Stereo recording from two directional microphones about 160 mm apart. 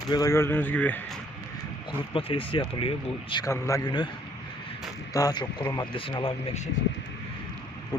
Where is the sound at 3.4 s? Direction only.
20° left (ahead or behind).